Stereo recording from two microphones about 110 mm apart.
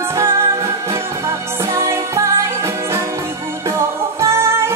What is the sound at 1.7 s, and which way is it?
Music, 25° right (ahead or behind).